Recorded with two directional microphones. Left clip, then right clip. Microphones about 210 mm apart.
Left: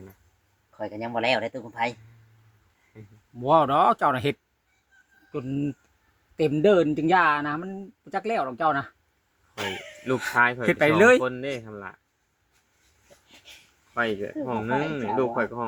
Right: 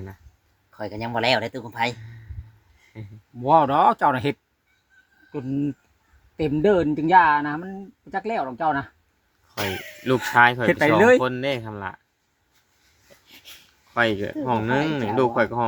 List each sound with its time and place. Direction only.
0.8 s speech: 50° right (ahead or behind)
3.4 s speech: 5° left (ahead or behind)
5.3 s speech: 10° left (ahead or behind)
9.6 s speech: 50° right (ahead or behind)
10.7 s speech: 5° left (ahead or behind)
11.2 s speech: 45° right (ahead or behind)
13.9 s speech: 50° right (ahead or behind)